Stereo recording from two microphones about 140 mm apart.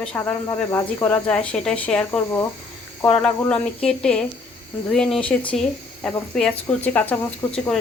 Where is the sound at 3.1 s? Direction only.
5° left (ahead or behind).